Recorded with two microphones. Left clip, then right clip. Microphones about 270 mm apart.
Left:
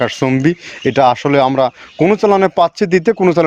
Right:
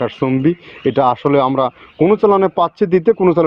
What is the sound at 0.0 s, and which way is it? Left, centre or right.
Speech, left.